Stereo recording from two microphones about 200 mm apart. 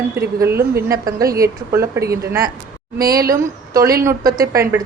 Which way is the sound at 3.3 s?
15° right (ahead or behind).